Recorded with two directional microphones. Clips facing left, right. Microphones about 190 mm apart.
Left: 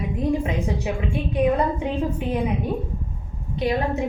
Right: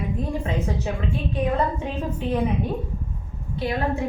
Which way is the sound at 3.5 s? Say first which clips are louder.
Left 2 dB; 20° left (ahead or behind).